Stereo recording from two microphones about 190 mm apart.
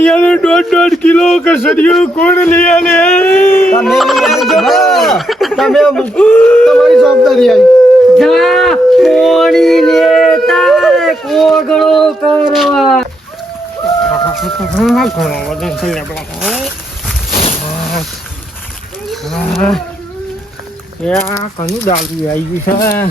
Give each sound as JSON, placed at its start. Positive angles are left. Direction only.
{"t": 0.0, "sound": "speech", "side_deg": 5}
{"t": 3.8, "sound": "speech", "side_deg": 0}
{"t": 8.1, "sound": "a sound", "side_deg": 0}
{"t": 14.3, "sound": "speech", "side_deg": 0}
{"t": 19.1, "sound": "speech", "side_deg": 0}
{"t": 21.0, "sound": "speech", "side_deg": 5}
{"t": 21.6, "sound": "speech", "side_deg": 40}
{"t": 22.8, "sound": "speech", "side_deg": 15}